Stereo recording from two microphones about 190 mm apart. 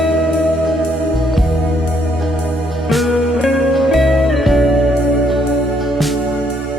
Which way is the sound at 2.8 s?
Centre (ahead or behind).